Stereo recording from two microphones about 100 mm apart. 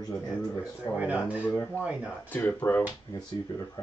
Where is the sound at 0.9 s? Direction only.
15° right (ahead or behind).